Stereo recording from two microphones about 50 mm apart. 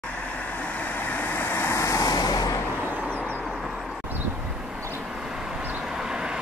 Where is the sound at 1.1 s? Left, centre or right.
Left.